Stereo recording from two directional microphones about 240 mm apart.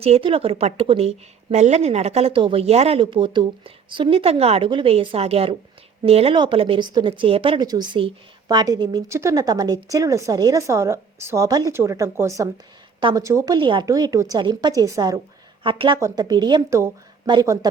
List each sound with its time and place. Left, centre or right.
0.0 s a woman's voice: right